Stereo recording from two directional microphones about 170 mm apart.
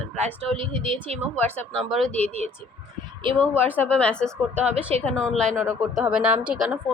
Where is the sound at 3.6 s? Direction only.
10° left (ahead or behind).